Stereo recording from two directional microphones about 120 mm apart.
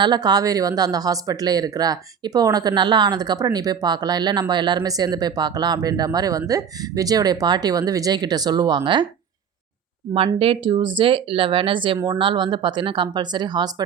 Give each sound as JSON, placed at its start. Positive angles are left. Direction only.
{"t": 0.0, "sound": "speech", "side_deg": -35}
{"t": 10.2, "sound": "speech", "side_deg": -50}